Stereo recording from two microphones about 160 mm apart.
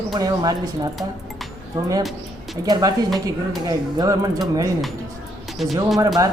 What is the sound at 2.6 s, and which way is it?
A woman's voice, 25° right (ahead or behind).